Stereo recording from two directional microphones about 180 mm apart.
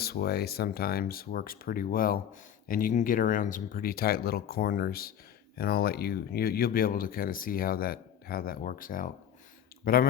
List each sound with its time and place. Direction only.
0.0 s speech: 60° left (ahead or behind)